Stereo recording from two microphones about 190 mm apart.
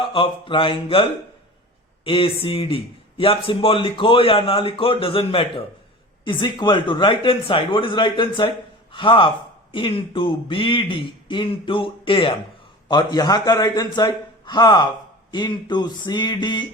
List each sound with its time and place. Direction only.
0.0 s speech: 25° left (ahead or behind)
2.0 s speech: 30° left (ahead or behind)